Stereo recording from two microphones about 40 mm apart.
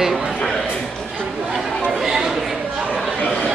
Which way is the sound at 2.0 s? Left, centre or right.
Centre.